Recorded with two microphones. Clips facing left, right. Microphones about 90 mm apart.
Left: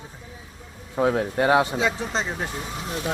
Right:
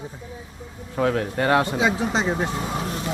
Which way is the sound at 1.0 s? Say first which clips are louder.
Left 1 dB; 15° left (ahead or behind).